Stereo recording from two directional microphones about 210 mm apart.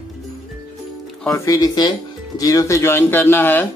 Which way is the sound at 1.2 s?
15° left (ahead or behind).